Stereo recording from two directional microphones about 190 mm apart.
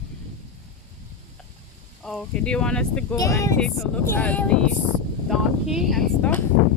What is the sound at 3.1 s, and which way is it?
Speech, 15° left (ahead or behind).